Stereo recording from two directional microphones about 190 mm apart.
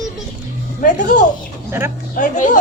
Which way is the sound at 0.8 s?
40° left (ahead or behind).